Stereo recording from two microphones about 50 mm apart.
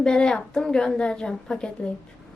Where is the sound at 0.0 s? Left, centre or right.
Centre.